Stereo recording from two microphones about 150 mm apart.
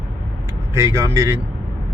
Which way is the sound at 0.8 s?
20° right (ahead or behind).